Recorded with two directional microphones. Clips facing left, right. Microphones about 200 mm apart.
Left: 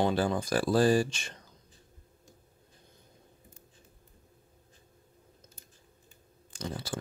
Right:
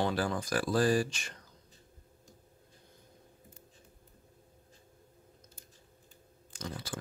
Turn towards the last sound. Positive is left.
turn(degrees=30)  # may be behind; listen again after turning